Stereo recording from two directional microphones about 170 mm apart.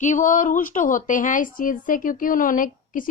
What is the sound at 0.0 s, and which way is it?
A woman's voice, 50° left (ahead or behind).